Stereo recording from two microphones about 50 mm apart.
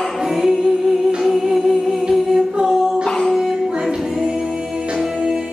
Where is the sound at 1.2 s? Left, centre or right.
Centre.